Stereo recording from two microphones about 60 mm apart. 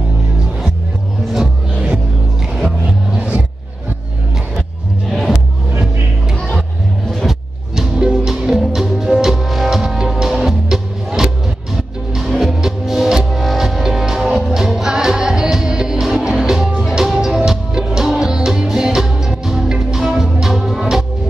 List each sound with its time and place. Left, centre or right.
1.3 s music: centre
3.2 s music: right
5.1 s music: centre
7.2 s music: centre